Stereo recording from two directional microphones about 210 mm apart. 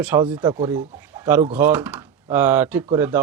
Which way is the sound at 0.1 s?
20° right (ahead or behind).